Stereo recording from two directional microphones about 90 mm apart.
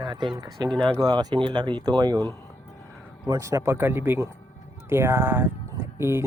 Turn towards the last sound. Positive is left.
turn(degrees=-30)  # may be behind; listen again after turning